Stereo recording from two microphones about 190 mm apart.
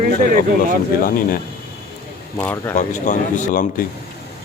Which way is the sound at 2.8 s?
40° left (ahead or behind).